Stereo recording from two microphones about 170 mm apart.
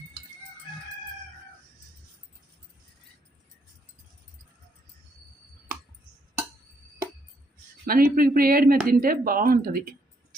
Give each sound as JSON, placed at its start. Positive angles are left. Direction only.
{"t": 7.9, "sound": "speech", "side_deg": -55}